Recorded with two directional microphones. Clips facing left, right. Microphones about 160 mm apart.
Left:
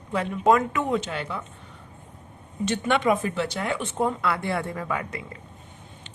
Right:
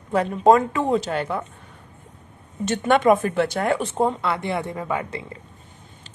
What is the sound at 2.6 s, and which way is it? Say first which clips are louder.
Speech: right 5 dB; 45° right (ahead or behind).